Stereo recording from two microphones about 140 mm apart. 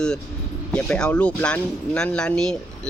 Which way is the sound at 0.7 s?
5° left (ahead or behind).